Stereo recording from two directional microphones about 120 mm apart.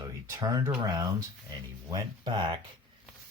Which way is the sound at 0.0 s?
25° right (ahead or behind).